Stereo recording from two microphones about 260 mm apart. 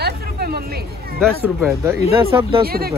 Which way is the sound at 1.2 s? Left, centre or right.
Centre.